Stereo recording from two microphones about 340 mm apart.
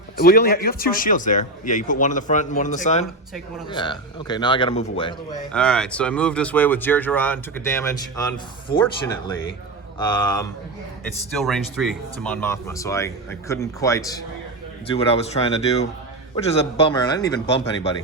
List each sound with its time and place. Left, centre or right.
0.2 s a man's voice: left
5.5 s speech: centre
11.3 s speech: centre